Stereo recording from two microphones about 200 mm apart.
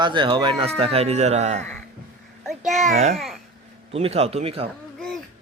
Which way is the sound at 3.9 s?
30° right (ahead or behind).